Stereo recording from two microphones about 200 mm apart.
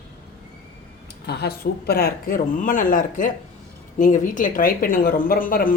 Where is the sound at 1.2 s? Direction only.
55° left (ahead or behind).